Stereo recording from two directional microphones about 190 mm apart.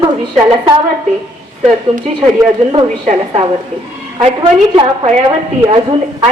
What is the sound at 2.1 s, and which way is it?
Speech, 35° right (ahead or behind).